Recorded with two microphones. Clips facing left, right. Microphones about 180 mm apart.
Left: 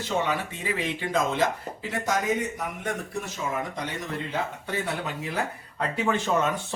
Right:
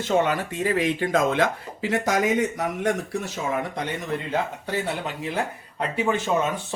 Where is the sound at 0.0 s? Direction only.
50° right (ahead or behind); by 2.9 s 85° right.